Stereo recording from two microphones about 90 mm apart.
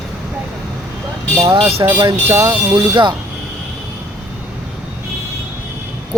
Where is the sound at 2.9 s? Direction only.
60° right (ahead or behind).